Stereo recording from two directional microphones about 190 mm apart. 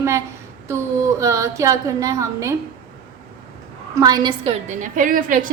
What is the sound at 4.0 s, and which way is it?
A woman's voice, 20° right (ahead or behind).